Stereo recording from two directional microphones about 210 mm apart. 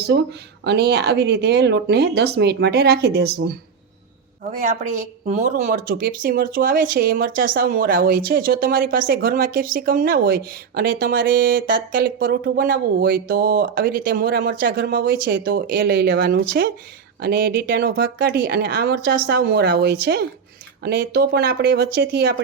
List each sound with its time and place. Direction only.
0.0 s speech: 50° right (ahead or behind)
5.3 s speech: 35° right (ahead or behind); by 22.4 s 50° right (ahead or behind)